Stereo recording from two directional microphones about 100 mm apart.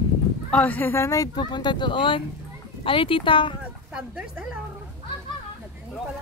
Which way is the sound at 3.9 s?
10° right (ahead or behind).